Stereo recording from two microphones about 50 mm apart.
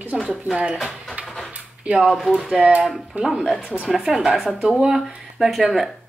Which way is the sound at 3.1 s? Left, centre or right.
Right.